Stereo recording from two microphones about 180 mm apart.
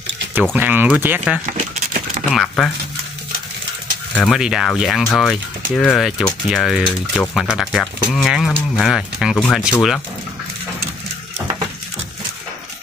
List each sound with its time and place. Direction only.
0.3 s speech: 10° right (ahead or behind)
1.4 s a sound: 50° right (ahead or behind)
2.3 s speech: 5° left (ahead or behind)
4.1 s speech: centre (ahead or behind)